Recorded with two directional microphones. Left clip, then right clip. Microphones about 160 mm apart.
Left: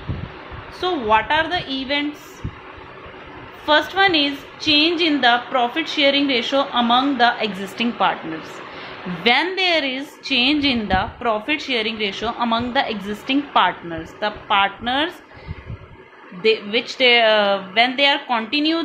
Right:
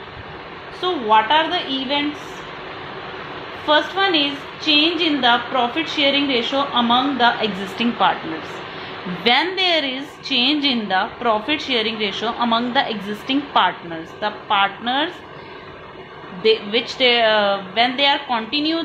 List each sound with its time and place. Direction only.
0.7 s a woman's voice: 45° left (ahead or behind)
3.6 s a woman's voice: 45° left (ahead or behind)
9.2 s a woman's voice: 25° left (ahead or behind)
16.4 s a woman's voice: 30° left (ahead or behind)